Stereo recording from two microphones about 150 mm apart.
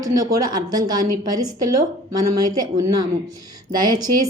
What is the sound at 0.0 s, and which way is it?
Speech, 25° right (ahead or behind).